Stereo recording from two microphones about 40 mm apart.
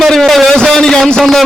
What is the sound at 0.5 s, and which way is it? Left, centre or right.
Speech, centre.